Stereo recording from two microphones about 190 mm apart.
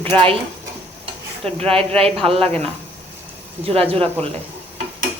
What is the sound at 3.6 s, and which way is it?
Speech, 30° right (ahead or behind).